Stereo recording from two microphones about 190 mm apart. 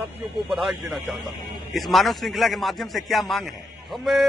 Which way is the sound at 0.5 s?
Centre (ahead or behind).